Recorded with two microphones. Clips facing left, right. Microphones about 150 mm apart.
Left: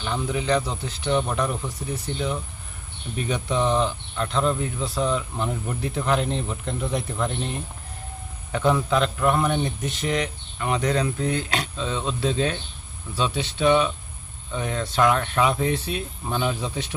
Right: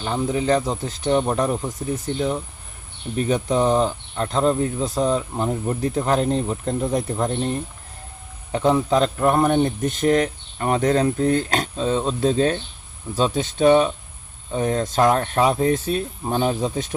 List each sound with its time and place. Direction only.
0.0 s speech: 40° right (ahead or behind)
8.5 s speech: 30° right (ahead or behind)